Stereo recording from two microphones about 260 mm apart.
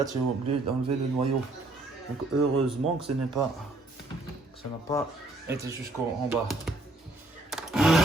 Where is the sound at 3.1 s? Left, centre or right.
Right.